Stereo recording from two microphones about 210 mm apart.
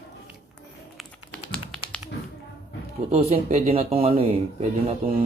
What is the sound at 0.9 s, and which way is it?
Typing, 5° left (ahead or behind).